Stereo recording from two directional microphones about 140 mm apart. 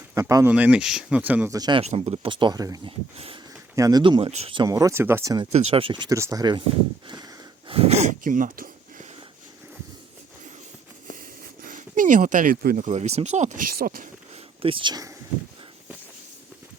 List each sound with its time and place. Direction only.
0.1 s speech: 25° right (ahead or behind)
0.5 s speech: 10° right (ahead or behind)
1.5 s speech: 25° right (ahead or behind)
1.8 s speech: 50° right (ahead or behind); by 2.8 s 25° right (ahead or behind)
2.8 s speech: 40° right (ahead or behind)
3.8 s speech: 25° right (ahead or behind)
4.0 s speech: 35° right (ahead or behind)
4.3 s speech: 55° right (ahead or behind)
4.5 s speech: 25° right (ahead or behind)
5.5 s speech: 45° right (ahead or behind)
6.1 s speech: 25° right (ahead or behind)
7.7 s speech: 45° right (ahead or behind); by 9.0 s 85° right
11.6 s speech: 70° right (ahead or behind); by 14.1 s 90° right
14.6 s speech: 40° right (ahead or behind)